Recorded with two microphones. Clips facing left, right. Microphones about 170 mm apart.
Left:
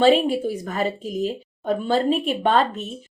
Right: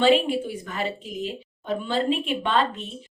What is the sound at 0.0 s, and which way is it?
A woman's voice, 40° left (ahead or behind).